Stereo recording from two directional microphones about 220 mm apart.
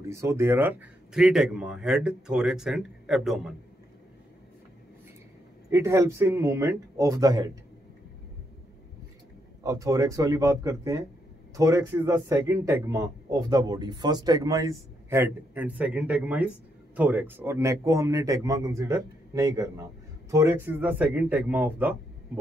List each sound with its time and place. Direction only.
0.0 s a man's voice: 10° right (ahead or behind)
5.7 s speech: 15° right (ahead or behind)
9.6 s speech: 15° right (ahead or behind)